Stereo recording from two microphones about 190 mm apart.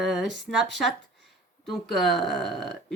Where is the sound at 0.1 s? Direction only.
Centre (ahead or behind).